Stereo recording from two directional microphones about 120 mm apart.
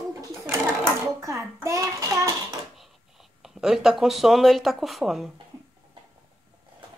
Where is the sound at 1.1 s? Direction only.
25° right (ahead or behind).